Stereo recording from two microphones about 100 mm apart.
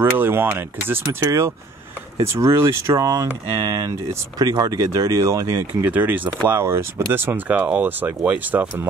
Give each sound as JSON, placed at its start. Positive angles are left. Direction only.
{"t": 0.0, "sound": "speech", "side_deg": -20}
{"t": 5.9, "sound": "speech", "side_deg": -20}